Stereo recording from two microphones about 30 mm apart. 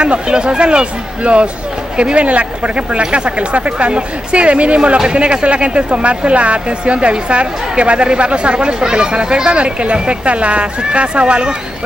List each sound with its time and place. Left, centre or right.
0.0 s speech: right
8.7 s speech: right